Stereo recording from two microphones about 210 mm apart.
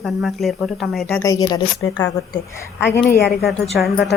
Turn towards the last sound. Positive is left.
turn(degrees=0)  # may be behind; listen again after turning